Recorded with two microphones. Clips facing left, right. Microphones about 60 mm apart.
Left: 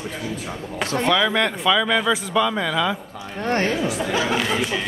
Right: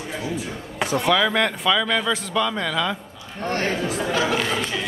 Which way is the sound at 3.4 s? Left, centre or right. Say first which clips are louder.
Left 3 dB; left.